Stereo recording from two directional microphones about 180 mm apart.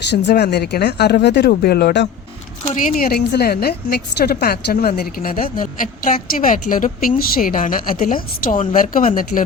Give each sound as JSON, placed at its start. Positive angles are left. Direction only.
{"t": 0.1, "sound": "a woman's voice", "side_deg": 70}
{"t": 2.7, "sound": "a woman's voice", "side_deg": 50}